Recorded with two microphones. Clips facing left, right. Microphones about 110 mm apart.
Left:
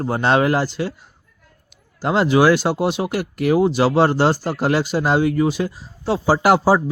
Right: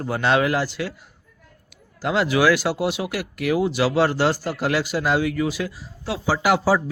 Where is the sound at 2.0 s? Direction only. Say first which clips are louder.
Left 4 dB; 35° left (ahead or behind).